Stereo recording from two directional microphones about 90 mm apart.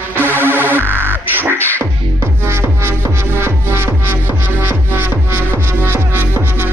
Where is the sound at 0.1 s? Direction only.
25° left (ahead or behind).